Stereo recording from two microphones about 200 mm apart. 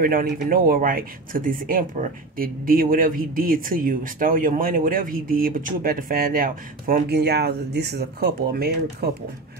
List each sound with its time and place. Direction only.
0.0 s speech: 45° right (ahead or behind)